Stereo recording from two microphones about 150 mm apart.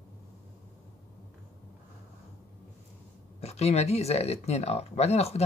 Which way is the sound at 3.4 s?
45° left (ahead or behind).